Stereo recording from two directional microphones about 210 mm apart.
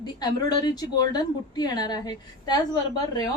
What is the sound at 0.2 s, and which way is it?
A woman's voice, 20° left (ahead or behind).